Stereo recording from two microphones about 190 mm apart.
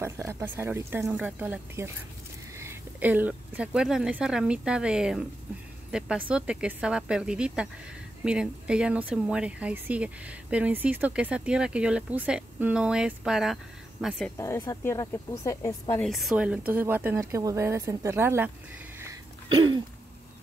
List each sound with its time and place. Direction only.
0.3 s speech: 15° right (ahead or behind)
14.4 s speech: 15° left (ahead or behind)
16.0 s speech: centre (ahead or behind)
19.5 s a sound: 25° right (ahead or behind)